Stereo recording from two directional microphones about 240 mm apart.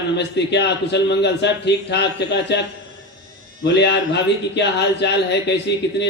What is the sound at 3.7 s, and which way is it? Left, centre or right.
A man's voice, left.